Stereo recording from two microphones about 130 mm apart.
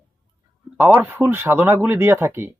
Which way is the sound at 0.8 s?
15° right (ahead or behind).